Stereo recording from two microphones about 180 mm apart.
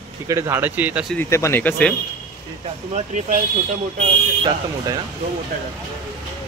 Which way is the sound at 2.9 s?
40° right (ahead or behind).